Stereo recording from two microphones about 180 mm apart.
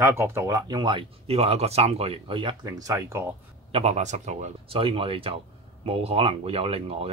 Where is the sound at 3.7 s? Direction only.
40° right (ahead or behind).